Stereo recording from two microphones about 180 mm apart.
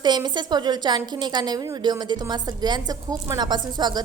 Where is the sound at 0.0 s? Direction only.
25° right (ahead or behind).